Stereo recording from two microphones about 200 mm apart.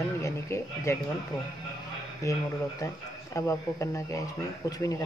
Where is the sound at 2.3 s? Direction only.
15° left (ahead or behind).